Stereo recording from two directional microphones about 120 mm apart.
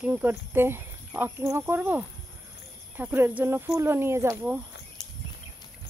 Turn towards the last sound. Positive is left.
turn(degrees=35)  # may be behind; listen again after turning